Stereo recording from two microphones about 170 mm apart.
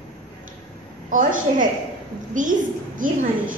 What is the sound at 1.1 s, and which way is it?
Speech, 50° right (ahead or behind).